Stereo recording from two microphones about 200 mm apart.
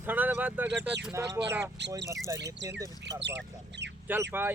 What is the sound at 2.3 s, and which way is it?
Speech, 60° right (ahead or behind).